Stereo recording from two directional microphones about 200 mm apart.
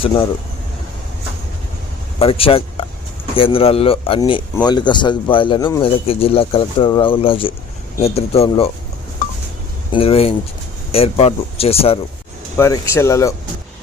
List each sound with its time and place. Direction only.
0.0 s a man's voice: 25° left (ahead or behind)
2.1 s a man's voice: 30° left (ahead or behind)
9.9 s a man's voice: 30° left (ahead or behind)
12.5 s speech: 15° left (ahead or behind)